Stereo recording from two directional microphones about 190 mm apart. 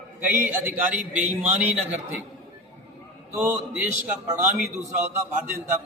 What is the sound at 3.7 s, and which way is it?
Speech, 10° right (ahead or behind).